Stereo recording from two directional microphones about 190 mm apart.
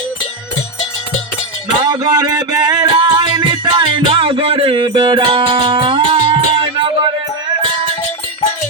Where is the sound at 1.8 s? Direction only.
20° right (ahead or behind).